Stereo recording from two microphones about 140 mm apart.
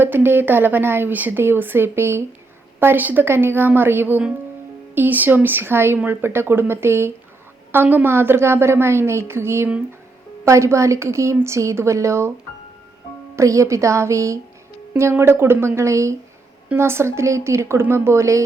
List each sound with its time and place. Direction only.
0.0 s a woman's voice: 15° right (ahead or behind)
13.3 s a woman's voice: 20° right (ahead or behind)